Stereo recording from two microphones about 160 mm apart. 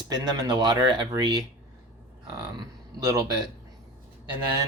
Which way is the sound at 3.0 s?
25° right (ahead or behind).